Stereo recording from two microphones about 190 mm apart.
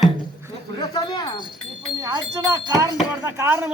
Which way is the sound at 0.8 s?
20° left (ahead or behind).